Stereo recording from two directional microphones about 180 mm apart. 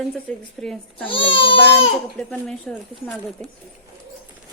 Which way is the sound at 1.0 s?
30° left (ahead or behind).